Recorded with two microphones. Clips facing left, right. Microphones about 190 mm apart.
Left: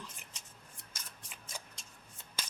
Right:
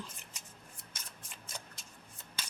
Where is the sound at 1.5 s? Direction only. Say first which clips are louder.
Even; 5° left (ahead or behind).